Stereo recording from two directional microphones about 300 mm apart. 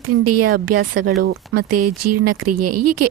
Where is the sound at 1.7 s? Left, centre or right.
Right.